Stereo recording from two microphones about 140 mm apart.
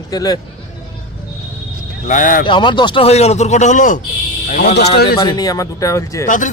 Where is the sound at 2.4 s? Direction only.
35° left (ahead or behind).